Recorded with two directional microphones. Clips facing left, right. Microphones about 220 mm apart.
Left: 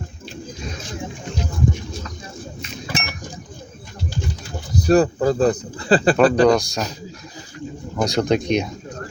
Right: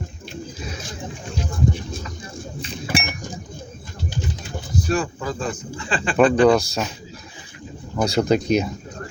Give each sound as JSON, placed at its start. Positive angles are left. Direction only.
{"t": 2.6, "sound": "chink", "side_deg": -30}
{"t": 4.8, "sound": "speech", "side_deg": 40}
{"t": 6.5, "sound": "speech", "side_deg": 0}
{"t": 8.1, "sound": "speech", "side_deg": 0}